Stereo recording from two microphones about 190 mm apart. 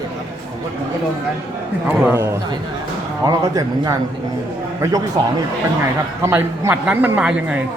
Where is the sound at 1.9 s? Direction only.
10° right (ahead or behind).